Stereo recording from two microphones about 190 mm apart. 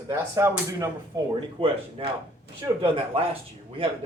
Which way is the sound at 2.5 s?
60° right (ahead or behind).